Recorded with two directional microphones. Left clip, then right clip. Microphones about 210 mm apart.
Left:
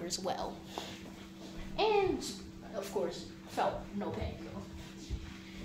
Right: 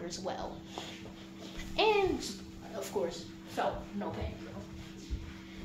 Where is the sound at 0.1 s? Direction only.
40° left (ahead or behind).